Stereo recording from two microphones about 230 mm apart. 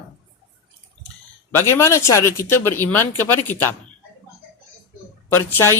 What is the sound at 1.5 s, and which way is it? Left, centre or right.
Speech, centre.